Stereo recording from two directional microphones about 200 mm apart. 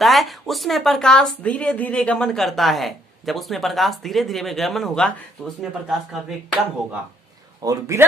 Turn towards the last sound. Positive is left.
turn(degrees=-15)  # may be behind; listen again after turning